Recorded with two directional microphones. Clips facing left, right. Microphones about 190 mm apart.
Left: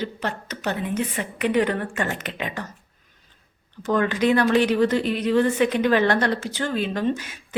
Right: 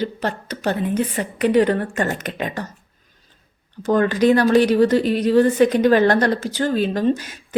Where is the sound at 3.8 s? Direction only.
40° right (ahead or behind).